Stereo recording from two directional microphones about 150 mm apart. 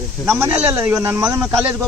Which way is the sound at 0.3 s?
15° right (ahead or behind).